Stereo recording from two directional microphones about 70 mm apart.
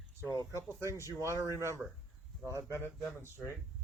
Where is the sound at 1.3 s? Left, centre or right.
Left.